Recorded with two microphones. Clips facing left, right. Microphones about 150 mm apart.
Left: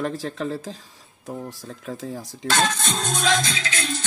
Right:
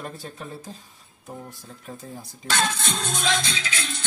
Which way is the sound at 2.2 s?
40° left (ahead or behind).